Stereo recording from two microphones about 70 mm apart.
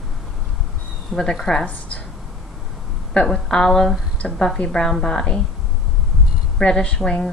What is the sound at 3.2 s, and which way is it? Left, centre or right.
A woman's voice, centre.